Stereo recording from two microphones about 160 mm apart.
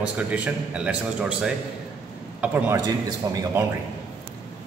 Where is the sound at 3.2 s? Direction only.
25° right (ahead or behind).